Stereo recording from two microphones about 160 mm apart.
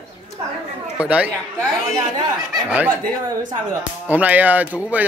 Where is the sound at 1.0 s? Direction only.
10° right (ahead or behind).